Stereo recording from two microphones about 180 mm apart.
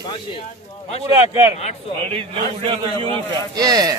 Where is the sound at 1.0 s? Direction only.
20° right (ahead or behind).